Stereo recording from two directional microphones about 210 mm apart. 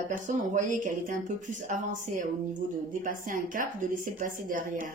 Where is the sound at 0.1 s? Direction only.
40° right (ahead or behind).